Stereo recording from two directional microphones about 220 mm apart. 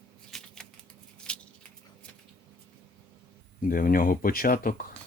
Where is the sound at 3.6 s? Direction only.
40° left (ahead or behind).